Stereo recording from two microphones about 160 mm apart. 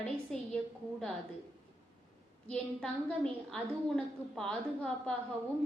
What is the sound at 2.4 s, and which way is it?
A woman's voice, 5° left (ahead or behind).